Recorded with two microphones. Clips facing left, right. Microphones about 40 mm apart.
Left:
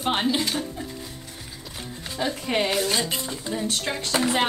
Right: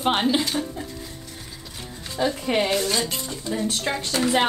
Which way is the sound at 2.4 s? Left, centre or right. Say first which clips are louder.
Even; centre.